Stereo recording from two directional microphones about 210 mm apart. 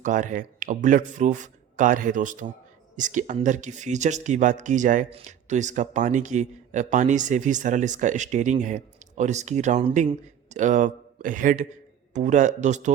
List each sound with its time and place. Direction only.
0.0 s speech: 35° right (ahead or behind)